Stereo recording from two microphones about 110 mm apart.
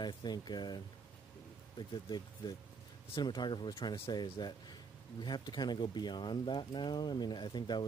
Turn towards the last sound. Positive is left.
turn(degrees=45)  # may be behind; listen again after turning